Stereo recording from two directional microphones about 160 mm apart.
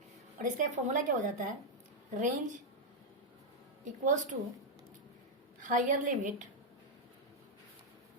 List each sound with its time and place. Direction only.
0.3 s a woman's voice: 55° right (ahead or behind)
4.0 s a woman's voice: 50° right (ahead or behind)
5.5 s a woman's voice: 55° right (ahead or behind)